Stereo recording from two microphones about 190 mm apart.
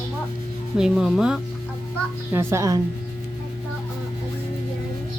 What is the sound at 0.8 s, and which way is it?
Speech, centre (ahead or behind).